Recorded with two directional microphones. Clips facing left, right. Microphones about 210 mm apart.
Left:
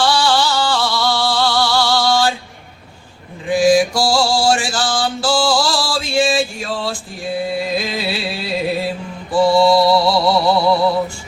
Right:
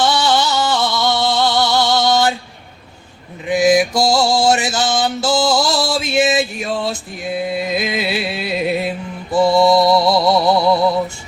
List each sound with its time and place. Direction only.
0.0 s music: 20° right (ahead or behind)
3.5 s mantra: 20° right (ahead or behind)
9.3 s music: 20° right (ahead or behind)